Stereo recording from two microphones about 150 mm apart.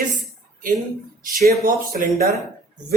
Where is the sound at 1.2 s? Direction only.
90° right.